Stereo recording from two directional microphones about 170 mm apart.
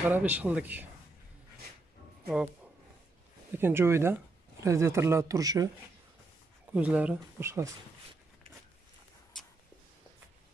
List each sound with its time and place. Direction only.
0.0 s speech: 10° right (ahead or behind)
2.2 s speech: 5° right (ahead or behind)
3.5 s speech: 15° right (ahead or behind)
6.7 s speech: 10° right (ahead or behind)